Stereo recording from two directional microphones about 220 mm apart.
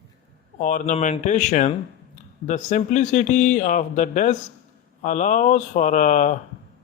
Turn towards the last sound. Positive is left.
turn(degrees=35)  # may be behind; listen again after turning